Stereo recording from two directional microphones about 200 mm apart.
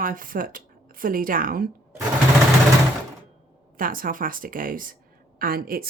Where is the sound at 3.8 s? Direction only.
45° right (ahead or behind).